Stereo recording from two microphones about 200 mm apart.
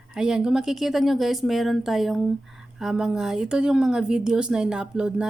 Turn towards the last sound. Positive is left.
turn(degrees=-5)  # may be behind; listen again after turning